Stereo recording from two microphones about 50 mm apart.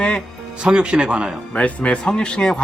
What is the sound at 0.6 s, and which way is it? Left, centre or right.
Speech, centre.